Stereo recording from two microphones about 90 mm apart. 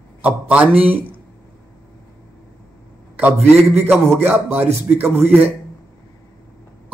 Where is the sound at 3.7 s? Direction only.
20° right (ahead or behind).